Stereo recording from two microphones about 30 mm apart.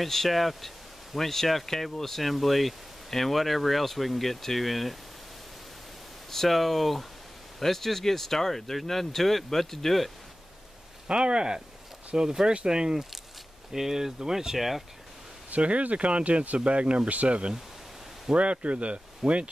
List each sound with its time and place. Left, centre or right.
0.0 s speech: centre
6.3 s speech: centre
11.1 s speech: right
13.7 s speech: centre
15.5 s speech: right